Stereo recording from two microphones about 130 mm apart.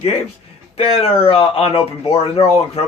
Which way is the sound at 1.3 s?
45° left (ahead or behind).